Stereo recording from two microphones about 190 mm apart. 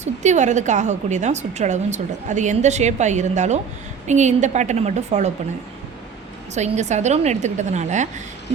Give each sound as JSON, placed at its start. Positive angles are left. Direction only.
{"t": 0.0, "sound": "a woman's voice", "side_deg": -40}
{"t": 6.5, "sound": "a woman's voice", "side_deg": -35}